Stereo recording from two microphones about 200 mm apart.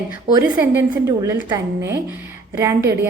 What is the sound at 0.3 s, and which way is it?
A woman's voice, 15° right (ahead or behind).